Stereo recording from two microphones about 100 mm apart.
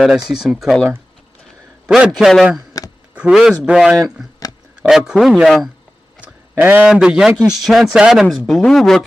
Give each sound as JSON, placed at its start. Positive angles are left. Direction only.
{"t": 0.3, "sound": "speech", "side_deg": -5}
{"t": 1.9, "sound": "a man's voice", "side_deg": -5}
{"t": 6.6, "sound": "a man's voice", "side_deg": -15}
{"t": 6.9, "sound": "a man's voice", "side_deg": -5}